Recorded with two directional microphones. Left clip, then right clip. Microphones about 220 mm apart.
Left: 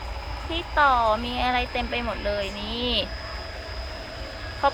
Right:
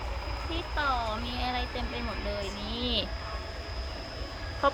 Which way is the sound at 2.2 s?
30° left (ahead or behind).